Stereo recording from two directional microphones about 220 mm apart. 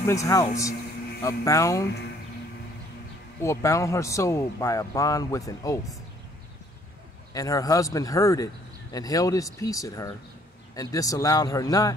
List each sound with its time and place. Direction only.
0.0 s speech: 15° left (ahead or behind)
3.4 s speech: 15° left (ahead or behind)
7.3 s speech: 15° left (ahead or behind)